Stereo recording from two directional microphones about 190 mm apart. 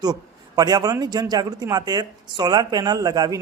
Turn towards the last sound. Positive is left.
turn(degrees=-20)  # may be behind; listen again after turning